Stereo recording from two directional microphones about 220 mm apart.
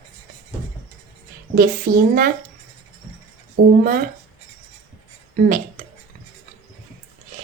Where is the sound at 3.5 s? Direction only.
40° right (ahead or behind).